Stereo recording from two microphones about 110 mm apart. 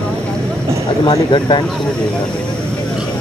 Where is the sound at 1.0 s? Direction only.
45° left (ahead or behind).